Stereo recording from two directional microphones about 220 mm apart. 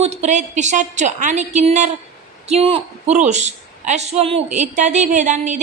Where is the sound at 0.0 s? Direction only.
30° right (ahead or behind).